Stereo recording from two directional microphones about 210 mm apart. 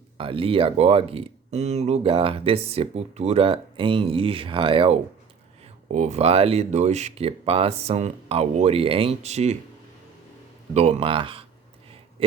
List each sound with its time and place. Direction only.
0.2 s speech: 25° right (ahead or behind)
10.8 s speech: 30° right (ahead or behind)